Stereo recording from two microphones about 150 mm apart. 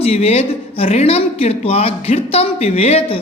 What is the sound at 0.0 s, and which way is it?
A woman's voice, 40° left (ahead or behind).